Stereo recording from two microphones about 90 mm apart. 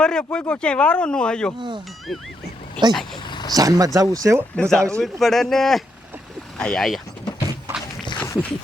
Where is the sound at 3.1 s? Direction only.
60° left (ahead or behind).